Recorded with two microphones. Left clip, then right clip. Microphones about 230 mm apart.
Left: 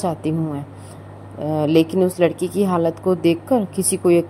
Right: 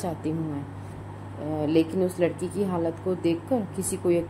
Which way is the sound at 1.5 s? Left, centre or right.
Left.